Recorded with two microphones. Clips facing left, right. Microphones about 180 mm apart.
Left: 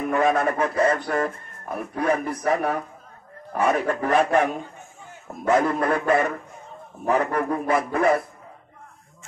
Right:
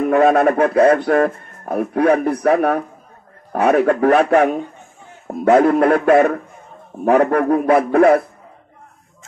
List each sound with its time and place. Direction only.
0.1 s speech: 60° right (ahead or behind)